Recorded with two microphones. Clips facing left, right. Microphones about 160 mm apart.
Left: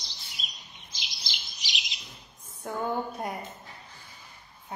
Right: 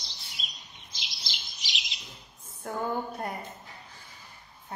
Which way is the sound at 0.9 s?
Centre (ahead or behind).